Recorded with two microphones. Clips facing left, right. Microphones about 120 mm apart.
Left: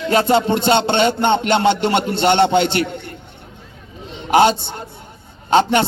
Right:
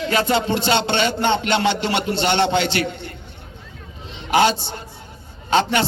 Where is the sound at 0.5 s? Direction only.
50° left (ahead or behind).